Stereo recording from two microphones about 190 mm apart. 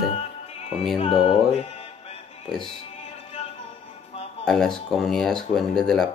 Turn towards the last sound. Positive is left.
turn(degrees=0)  # may be behind; listen again after turning